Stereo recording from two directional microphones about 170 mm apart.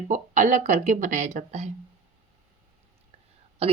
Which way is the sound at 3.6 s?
35° right (ahead or behind).